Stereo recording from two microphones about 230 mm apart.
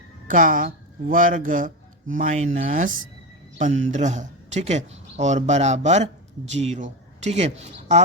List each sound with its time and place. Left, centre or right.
0.3 s a man's voice: right